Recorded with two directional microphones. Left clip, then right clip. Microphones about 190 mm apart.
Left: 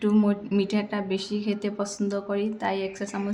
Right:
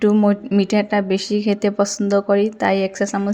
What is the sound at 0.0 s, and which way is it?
A woman's voice, 30° right (ahead or behind).